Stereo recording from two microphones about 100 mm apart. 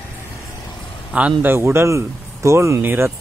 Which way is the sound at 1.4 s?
25° right (ahead or behind).